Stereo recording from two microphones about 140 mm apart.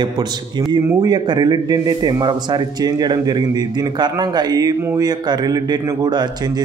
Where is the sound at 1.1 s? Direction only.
30° right (ahead or behind).